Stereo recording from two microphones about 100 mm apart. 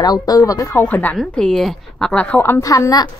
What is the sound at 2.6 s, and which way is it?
Speech, 35° left (ahead or behind).